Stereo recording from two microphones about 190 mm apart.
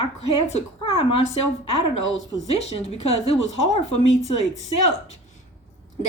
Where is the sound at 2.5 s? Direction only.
35° left (ahead or behind).